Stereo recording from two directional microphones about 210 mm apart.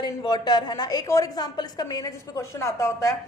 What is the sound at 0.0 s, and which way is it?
A woman's voice, 20° left (ahead or behind).